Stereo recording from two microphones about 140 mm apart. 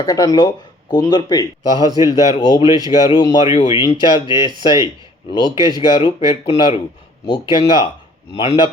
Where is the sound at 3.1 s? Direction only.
30° left (ahead or behind).